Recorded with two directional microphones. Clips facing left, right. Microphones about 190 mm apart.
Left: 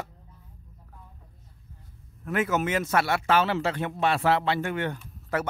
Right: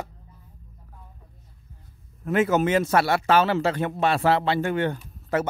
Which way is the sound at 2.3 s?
30° right (ahead or behind).